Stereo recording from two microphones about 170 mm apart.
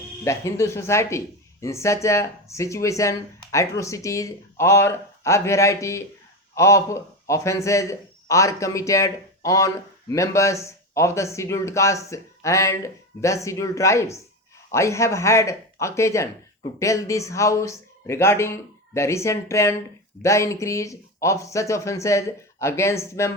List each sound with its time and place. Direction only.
0.3 s a man's voice: 15° left (ahead or behind)